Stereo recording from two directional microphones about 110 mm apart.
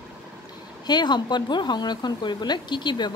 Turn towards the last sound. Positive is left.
turn(degrees=45)  # may be behind; listen again after turning